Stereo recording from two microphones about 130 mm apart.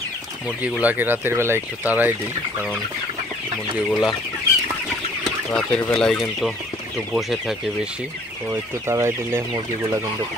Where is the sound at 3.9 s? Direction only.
5° right (ahead or behind).